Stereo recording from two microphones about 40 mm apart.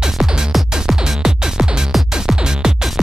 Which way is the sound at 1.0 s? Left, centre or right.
Centre.